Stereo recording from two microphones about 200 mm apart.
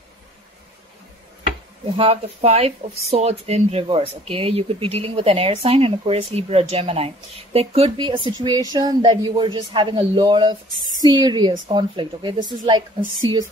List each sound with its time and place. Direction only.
2.0 s speech: 30° right (ahead or behind)